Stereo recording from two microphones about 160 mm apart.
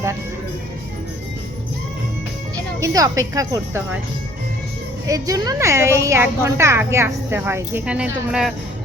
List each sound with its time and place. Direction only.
2.8 s speech: 20° right (ahead or behind)
5.0 s a woman's voice: 20° right (ahead or behind); by 8.5 s 5° right (ahead or behind)